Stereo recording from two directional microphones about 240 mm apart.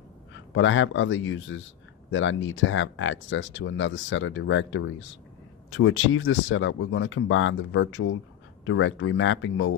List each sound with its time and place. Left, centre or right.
0.3 s speech: left